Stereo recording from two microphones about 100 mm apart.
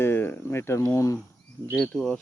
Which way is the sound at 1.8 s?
10° left (ahead or behind).